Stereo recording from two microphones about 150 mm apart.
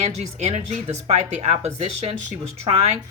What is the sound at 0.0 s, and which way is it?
Speech, 50° right (ahead or behind).